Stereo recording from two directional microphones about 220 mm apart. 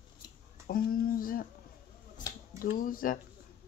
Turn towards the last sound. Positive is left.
turn(degrees=40)  # may be behind; listen again after turning